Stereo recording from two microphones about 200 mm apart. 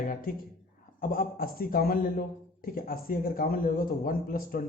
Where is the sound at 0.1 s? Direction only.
45° left (ahead or behind).